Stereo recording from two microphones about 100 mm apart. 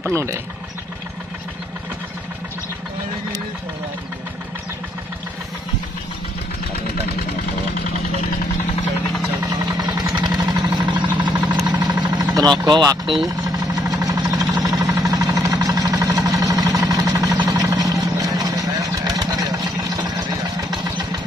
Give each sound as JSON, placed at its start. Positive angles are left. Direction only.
{"t": 0.1, "sound": "speech", "side_deg": -30}
{"t": 9.4, "sound": "vehicle", "side_deg": -40}